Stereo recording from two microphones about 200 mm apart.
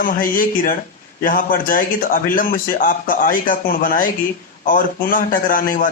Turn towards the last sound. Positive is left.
turn(degrees=45)  # may be behind; listen again after turning